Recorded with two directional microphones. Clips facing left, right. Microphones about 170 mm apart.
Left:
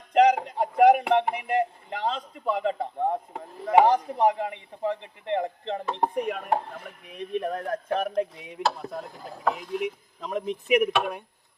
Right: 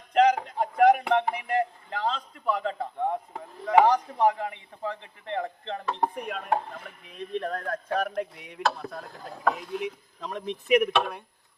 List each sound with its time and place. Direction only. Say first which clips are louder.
0.1 s a sound: left 2 dB; 20° left (ahead or behind)
1.1 s a man's voice: left 2 dB; 20° left (ahead or behind)
9.4 s speech: left 1 dB; centre (ahead or behind)